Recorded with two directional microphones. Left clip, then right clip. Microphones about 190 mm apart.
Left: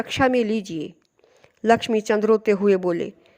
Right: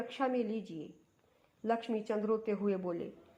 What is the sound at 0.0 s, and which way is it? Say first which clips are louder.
A woman's voice: left 14 dB; 45° left (ahead or behind).